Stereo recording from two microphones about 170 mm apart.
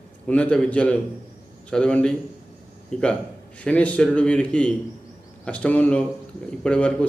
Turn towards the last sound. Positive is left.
turn(degrees=5)  # may be behind; listen again after turning